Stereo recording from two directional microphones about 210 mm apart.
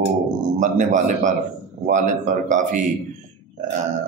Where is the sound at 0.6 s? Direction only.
35° right (ahead or behind).